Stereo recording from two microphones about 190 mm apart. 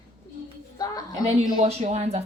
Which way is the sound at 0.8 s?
20° left (ahead or behind).